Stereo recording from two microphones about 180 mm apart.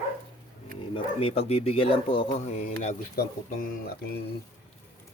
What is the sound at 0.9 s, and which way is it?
Speech, 30° left (ahead or behind).